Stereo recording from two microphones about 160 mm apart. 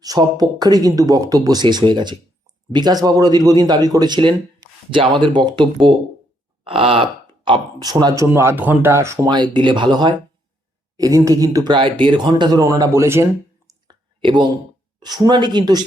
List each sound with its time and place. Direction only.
0.0 s speech: 25° right (ahead or behind)
13.7 s a sound: 30° right (ahead or behind)
15.0 s speech: 25° right (ahead or behind)